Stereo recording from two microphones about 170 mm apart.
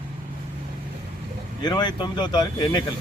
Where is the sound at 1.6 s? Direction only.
25° left (ahead or behind).